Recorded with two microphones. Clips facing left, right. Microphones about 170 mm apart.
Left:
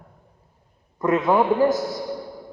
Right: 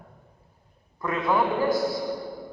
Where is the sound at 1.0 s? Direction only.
45° left (ahead or behind).